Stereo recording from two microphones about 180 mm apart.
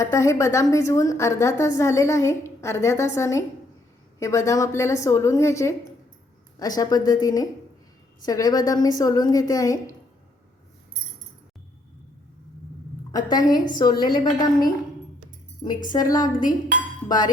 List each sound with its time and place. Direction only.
0.0 s a woman's voice: 15° left (ahead or behind)
13.1 s a woman's voice: 20° left (ahead or behind)
15.9 s a woman's voice: 20° left (ahead or behind)